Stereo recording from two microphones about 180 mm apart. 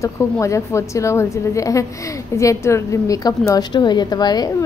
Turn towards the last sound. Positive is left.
turn(degrees=20)  # may be behind; listen again after turning